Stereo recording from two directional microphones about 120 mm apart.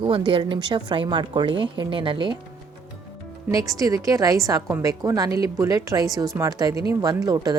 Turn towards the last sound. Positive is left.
turn(degrees=-30)  # may be behind; listen again after turning